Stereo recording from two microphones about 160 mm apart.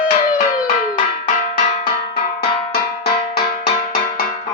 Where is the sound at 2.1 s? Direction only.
70° left (ahead or behind).